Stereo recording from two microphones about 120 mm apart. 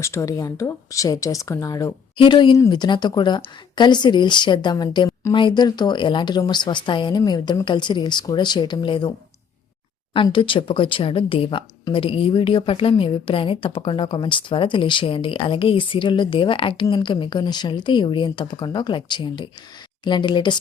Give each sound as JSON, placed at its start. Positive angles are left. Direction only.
{"t": 0.0, "sound": "speech", "side_deg": 25}
{"t": 2.1, "sound": "a woman's voice", "side_deg": 45}
{"t": 5.3, "sound": "speech", "side_deg": 40}
{"t": 10.3, "sound": "a woman's voice", "side_deg": 45}